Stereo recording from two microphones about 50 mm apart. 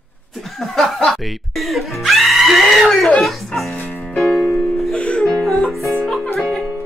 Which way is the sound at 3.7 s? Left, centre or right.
Left.